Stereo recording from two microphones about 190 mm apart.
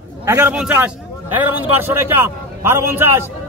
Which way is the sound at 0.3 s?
10° right (ahead or behind).